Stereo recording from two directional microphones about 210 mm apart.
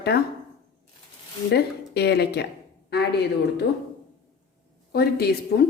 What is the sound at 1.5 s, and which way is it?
A woman's voice, 50° left (ahead or behind).